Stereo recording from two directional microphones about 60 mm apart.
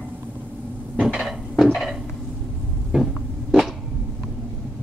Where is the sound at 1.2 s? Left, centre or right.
Centre.